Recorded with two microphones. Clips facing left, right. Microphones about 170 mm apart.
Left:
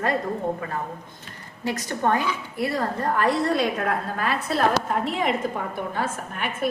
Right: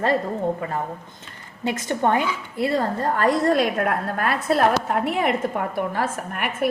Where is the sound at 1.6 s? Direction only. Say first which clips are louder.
Right 3 dB; 20° right (ahead or behind).